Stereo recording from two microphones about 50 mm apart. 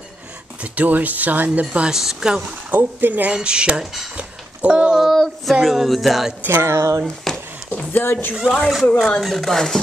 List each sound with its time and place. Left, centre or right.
0.6 s speech: right
1.7 s speech: centre
2.0 s speech: centre
2.7 s speech: right
3.3 s speech: centre
4.2 s a sound: right
5.0 s music: centre
6.4 s music: right
7.3 s a sound: centre
7.9 s speech: left
8.4 s speech: centre